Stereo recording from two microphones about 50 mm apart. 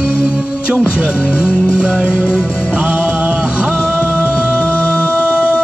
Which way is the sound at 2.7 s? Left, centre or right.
Right.